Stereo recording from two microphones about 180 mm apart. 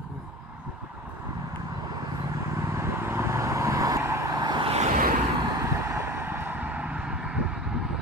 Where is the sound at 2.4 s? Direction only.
15° right (ahead or behind); by 5.1 s 40° right (ahead or behind).